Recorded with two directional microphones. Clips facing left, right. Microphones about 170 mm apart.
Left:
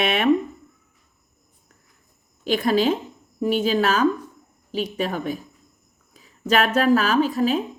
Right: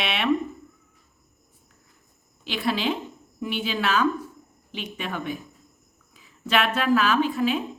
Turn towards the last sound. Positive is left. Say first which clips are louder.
# left 3 dB
turn(degrees=40)  # may be behind; listen again after turning